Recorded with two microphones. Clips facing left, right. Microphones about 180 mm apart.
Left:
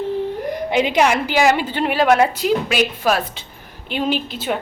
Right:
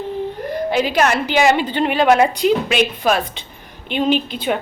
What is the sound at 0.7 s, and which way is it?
A woman's voice, 20° left (ahead or behind).